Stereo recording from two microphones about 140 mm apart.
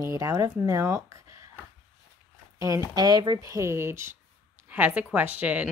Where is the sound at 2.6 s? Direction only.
25° right (ahead or behind).